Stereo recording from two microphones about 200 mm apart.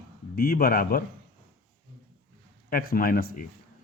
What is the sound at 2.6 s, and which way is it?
Speech, 45° left (ahead or behind).